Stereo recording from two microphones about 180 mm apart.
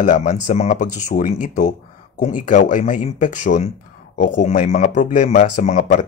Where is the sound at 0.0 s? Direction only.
45° left (ahead or behind).